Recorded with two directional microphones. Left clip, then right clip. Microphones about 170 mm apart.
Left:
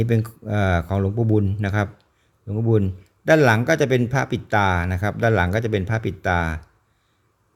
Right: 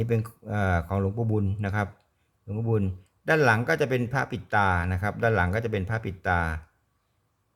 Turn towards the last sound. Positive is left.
turn(degrees=20)  # may be behind; listen again after turning